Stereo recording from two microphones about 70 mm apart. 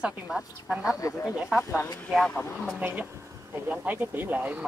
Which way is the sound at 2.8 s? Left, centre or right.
Right.